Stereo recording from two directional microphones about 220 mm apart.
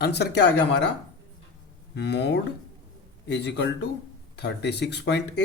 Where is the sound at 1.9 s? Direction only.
50° left (ahead or behind).